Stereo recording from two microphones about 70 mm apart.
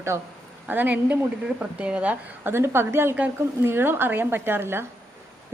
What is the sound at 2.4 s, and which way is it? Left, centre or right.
A woman's voice, right.